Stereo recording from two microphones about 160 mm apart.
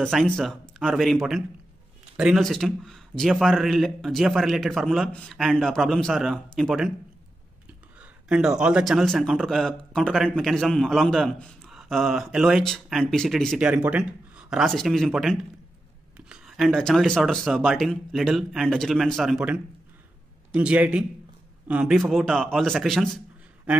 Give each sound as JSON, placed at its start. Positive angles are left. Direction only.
{"t": 0.0, "sound": "speech", "side_deg": 5}
{"t": 8.0, "sound": "a man's voice", "side_deg": -5}